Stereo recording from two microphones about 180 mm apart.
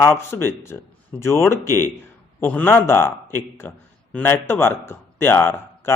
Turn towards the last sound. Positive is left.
turn(degrees=15)  # may be behind; listen again after turning